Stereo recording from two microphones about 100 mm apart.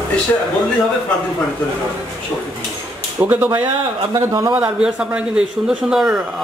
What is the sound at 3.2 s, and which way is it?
Speech, 20° right (ahead or behind).